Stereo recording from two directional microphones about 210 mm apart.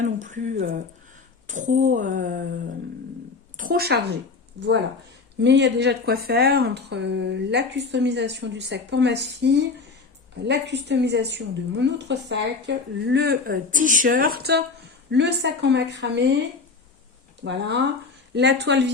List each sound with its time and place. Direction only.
0.0 s a woman's voice: 35° right (ahead or behind)
5.4 s a woman's voice: 55° right (ahead or behind)
18.3 s a woman's voice: 55° right (ahead or behind)